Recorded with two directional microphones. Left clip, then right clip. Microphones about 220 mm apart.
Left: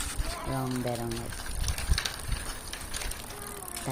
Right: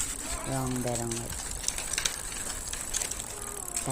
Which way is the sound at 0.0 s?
30° left (ahead or behind).